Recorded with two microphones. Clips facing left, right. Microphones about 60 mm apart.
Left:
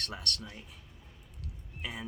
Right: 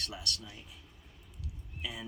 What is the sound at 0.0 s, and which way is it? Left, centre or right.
Speech, left.